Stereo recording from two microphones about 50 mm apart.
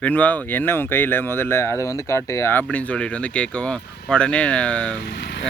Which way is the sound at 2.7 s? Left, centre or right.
Left.